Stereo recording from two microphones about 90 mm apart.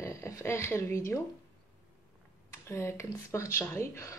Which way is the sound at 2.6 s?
30° left (ahead or behind).